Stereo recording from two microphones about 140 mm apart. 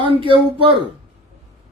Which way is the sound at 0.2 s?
40° right (ahead or behind).